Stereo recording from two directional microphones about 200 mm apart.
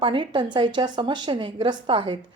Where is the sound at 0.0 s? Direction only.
25° right (ahead or behind).